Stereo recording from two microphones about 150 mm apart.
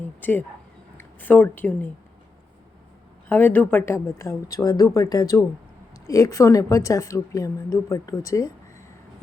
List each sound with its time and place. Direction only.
0.0 s speech: 15° left (ahead or behind)
3.2 s a woman's voice: 10° left (ahead or behind)